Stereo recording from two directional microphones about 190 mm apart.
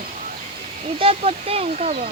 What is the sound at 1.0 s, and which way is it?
Speech, 30° right (ahead or behind).